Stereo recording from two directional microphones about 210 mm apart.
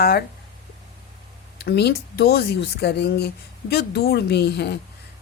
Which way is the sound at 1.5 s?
50° left (ahead or behind).